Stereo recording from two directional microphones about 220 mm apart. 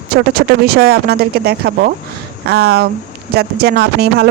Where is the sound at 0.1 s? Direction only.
45° right (ahead or behind).